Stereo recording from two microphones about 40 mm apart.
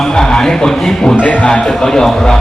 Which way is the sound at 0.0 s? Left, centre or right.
Centre.